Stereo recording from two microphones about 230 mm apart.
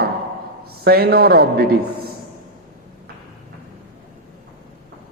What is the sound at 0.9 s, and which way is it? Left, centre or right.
Speech, right.